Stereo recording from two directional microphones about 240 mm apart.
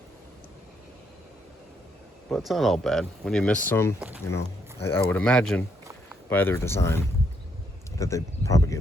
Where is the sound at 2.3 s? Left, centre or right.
Centre.